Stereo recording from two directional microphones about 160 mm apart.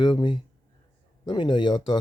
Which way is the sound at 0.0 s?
30° left (ahead or behind).